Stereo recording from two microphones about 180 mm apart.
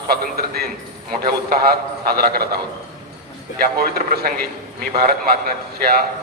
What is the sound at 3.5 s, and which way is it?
A man's voice, 55° right (ahead or behind).